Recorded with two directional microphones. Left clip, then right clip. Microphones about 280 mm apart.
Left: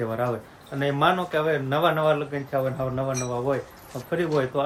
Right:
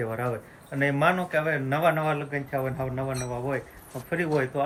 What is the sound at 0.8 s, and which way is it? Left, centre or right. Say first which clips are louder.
Speech: left 1 dB; centre.